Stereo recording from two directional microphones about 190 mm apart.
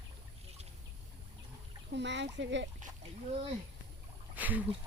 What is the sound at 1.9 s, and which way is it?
Speech, 65° right (ahead or behind).